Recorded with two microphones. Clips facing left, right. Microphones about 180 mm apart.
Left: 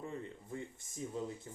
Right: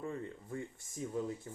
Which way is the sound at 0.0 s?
20° left (ahead or behind).